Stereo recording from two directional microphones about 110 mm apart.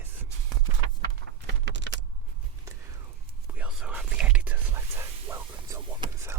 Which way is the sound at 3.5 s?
10° right (ahead or behind).